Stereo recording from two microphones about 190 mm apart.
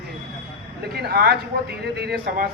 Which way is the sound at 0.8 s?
55° right (ahead or behind).